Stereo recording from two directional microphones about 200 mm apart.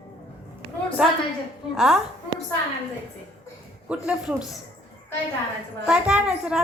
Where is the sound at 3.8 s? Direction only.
5° right (ahead or behind).